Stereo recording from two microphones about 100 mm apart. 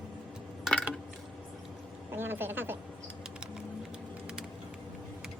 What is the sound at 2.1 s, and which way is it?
Speech, 20° right (ahead or behind).